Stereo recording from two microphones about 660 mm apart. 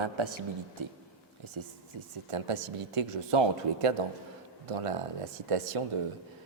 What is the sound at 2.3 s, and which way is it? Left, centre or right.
Speech, right.